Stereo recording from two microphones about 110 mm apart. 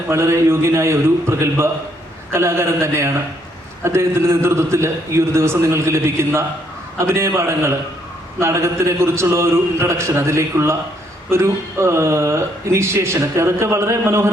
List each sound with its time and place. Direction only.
0.1 s speech: 25° right (ahead or behind)